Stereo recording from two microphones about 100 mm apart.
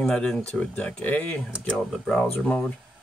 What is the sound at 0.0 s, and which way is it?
Speech, 10° left (ahead or behind).